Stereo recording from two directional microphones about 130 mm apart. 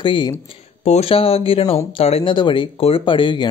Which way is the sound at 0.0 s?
40° left (ahead or behind).